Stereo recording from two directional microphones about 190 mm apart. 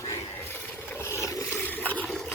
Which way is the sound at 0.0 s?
15° left (ahead or behind).